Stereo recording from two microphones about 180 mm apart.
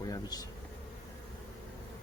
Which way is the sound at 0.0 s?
20° left (ahead or behind).